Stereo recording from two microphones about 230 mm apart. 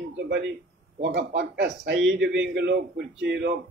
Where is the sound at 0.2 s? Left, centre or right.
Right.